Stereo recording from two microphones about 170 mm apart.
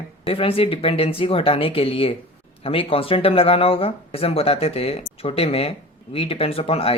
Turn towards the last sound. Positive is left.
turn(degrees=35)  # may be behind; listen again after turning